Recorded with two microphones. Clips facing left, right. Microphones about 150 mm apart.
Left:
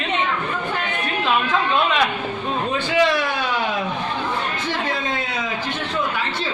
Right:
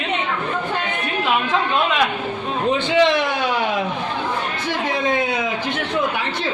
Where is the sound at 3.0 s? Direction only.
20° right (ahead or behind).